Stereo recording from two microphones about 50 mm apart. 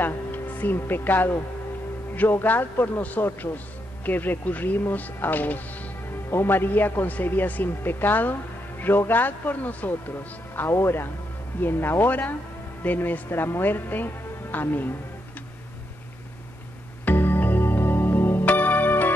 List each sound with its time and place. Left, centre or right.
0.0 s music: left
0.7 s a woman's voice: left
6.3 s a woman's voice: left
13.3 s a woman's voice: left
17.0 s music: left